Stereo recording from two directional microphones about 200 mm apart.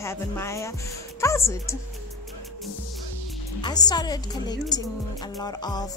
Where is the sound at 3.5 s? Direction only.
20° left (ahead or behind).